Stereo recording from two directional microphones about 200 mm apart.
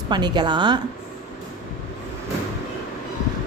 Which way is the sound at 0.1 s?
20° right (ahead or behind).